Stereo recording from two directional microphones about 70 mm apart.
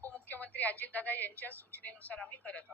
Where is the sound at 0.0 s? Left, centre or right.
Left.